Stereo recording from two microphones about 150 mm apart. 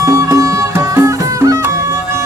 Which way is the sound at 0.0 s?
20° right (ahead or behind).